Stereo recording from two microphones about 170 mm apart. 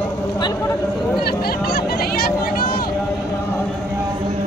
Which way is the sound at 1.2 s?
65° left (ahead or behind).